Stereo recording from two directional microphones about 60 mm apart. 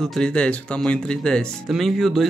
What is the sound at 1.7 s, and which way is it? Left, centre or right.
Speech, centre.